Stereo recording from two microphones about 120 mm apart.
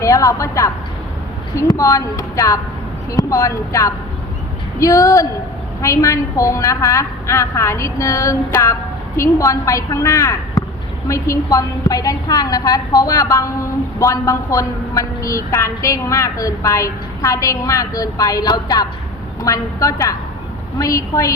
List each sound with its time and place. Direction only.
0.0 s a woman's voice: 25° left (ahead or behind)